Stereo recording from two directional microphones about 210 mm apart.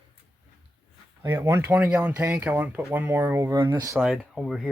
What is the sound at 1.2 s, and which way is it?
Speech, 15° right (ahead or behind).